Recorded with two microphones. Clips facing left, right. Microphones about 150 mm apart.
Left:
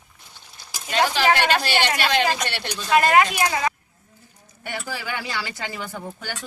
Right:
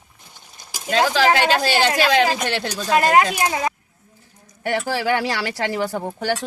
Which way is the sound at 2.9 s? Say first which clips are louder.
Right 1 dB; 40° right (ahead or behind).